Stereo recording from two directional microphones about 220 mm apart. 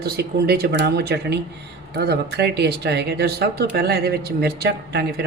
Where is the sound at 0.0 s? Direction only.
45° right (ahead or behind).